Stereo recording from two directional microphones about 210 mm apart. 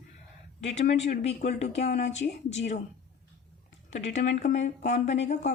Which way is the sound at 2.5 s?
35° left (ahead or behind).